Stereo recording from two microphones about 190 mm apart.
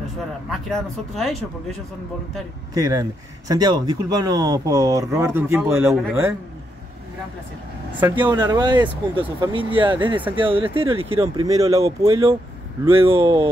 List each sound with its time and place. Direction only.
0.5 s speech: centre (ahead or behind)
2.7 s speech: 20° right (ahead or behind)
8.0 s speech: 10° right (ahead or behind)
8.4 s speech: 20° right (ahead or behind)
12.8 s speech: 15° right (ahead or behind)
13.1 s speech: 30° right (ahead or behind)